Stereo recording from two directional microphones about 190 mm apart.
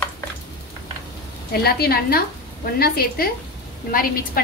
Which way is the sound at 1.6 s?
55° left (ahead or behind).